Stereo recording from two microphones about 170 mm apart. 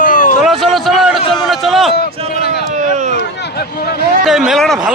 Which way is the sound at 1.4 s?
Centre (ahead or behind).